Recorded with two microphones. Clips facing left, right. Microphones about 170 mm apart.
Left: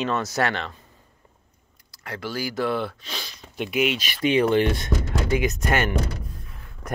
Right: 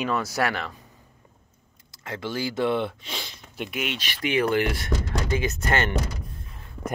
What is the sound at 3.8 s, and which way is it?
Speech, 15° left (ahead or behind).